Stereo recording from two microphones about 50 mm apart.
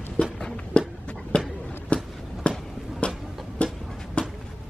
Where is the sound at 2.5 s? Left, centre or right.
Left.